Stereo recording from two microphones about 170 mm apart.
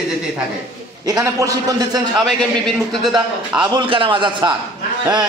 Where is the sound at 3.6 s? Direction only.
30° right (ahead or behind).